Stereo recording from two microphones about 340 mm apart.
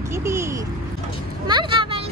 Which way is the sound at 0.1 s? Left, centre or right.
Centre.